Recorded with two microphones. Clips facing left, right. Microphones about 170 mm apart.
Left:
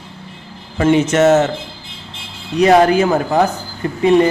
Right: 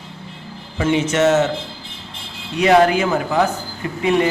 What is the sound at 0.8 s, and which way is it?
Speech, 50° left (ahead or behind).